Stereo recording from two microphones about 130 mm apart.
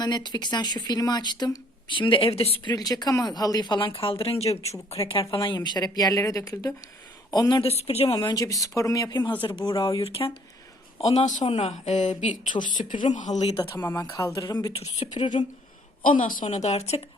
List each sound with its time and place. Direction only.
0.0 s speech: 35° left (ahead or behind); by 2.6 s 50° left (ahead or behind)
2.6 s a woman's voice: 30° left (ahead or behind); by 4.9 s 55° left (ahead or behind)
5.3 s a woman's voice: 40° left (ahead or behind)
7.6 s speech: 50° left (ahead or behind)
8.2 s a woman's voice: 30° left (ahead or behind); by 11.4 s 65° left (ahead or behind)
11.4 s a woman's voice: 50° left (ahead or behind)
13.8 s a woman's voice: 25° left (ahead or behind)
14.8 s speech: 55° left (ahead or behind)
16.0 s a woman's voice: 90° left; by 17.0 s 55° left (ahead or behind)